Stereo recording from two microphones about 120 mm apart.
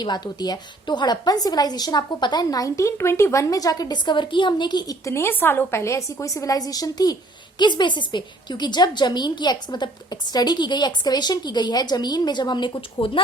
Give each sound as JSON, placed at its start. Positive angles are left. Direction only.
{"t": 0.0, "sound": "a woman's voice", "side_deg": 35}
{"t": 5.0, "sound": "a woman's voice", "side_deg": 20}